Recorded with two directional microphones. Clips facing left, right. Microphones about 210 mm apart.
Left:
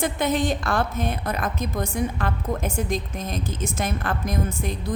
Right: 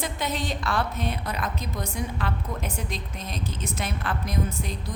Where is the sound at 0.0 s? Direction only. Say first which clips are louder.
Left 7 dB; 50° left (ahead or behind).